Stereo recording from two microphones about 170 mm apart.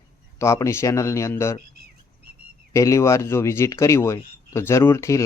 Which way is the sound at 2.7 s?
15° left (ahead or behind).